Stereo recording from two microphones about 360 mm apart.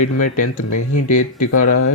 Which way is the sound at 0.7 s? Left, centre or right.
Left.